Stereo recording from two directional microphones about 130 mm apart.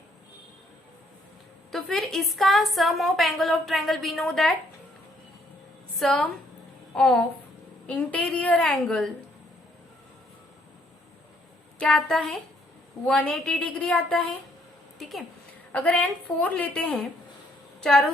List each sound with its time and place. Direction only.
1.7 s a woman's voice: centre (ahead or behind)
6.0 s a woman's voice: 5° left (ahead or behind)
11.8 s a woman's voice: 5° left (ahead or behind)
15.7 s a woman's voice: 10° left (ahead or behind)